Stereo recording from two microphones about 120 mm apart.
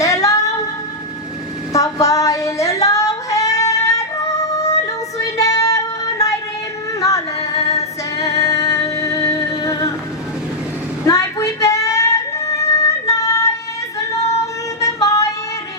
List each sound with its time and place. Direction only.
0.0 s music: 25° left (ahead or behind)
1.7 s female singing: 25° left (ahead or behind)
5.1 s child singing: 25° left (ahead or behind)
7.0 s yodeling: 25° left (ahead or behind)
8.2 s music: 25° left (ahead or behind)
11.0 s a sound: 25° left (ahead or behind)
15.0 s music: 25° left (ahead or behind)